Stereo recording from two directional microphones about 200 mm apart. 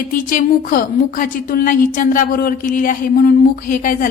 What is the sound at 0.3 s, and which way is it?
A woman's voice, 45° left (ahead or behind).